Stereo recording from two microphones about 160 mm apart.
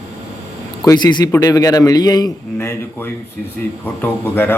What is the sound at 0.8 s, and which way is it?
A man's voice, 25° left (ahead or behind).